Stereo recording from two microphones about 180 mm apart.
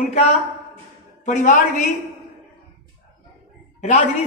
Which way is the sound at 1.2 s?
45° left (ahead or behind).